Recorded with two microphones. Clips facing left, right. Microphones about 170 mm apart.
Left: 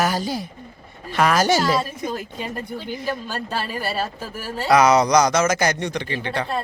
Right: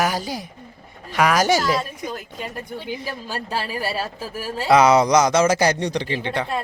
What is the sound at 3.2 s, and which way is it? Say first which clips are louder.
Speech: even; 10° right (ahead or behind).